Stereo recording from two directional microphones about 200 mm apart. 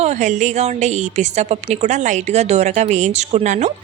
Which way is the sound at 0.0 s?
35° right (ahead or behind).